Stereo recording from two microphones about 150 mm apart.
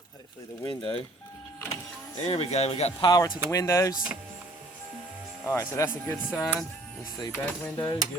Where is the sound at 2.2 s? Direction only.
45° left (ahead or behind).